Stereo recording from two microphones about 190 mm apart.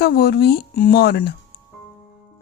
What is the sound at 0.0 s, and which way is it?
A woman's voice, 55° left (ahead or behind).